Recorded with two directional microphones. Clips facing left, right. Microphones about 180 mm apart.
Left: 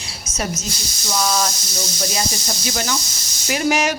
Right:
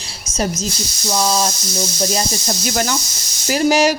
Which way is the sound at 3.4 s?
35° right (ahead or behind).